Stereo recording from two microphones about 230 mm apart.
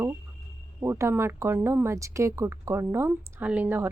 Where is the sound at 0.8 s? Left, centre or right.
Centre.